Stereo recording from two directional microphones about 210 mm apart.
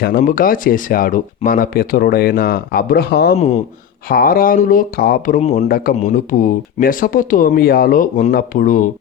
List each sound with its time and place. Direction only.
0.0 s speech: 45° left (ahead or behind)
3.3 s speech: 30° left (ahead or behind)
4.1 s speech: 45° left (ahead or behind)